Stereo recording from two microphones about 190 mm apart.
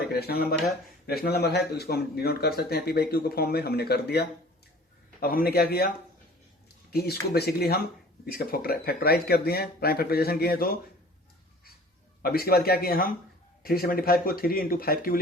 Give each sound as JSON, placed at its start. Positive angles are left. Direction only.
{"t": 0.1, "sound": "a man's voice", "side_deg": 55}
{"t": 6.9, "sound": "a man's voice", "side_deg": 55}
{"t": 12.2, "sound": "speech", "side_deg": 55}